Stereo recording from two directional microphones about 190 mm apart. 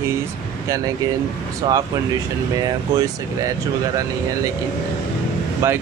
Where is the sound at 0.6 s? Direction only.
15° right (ahead or behind).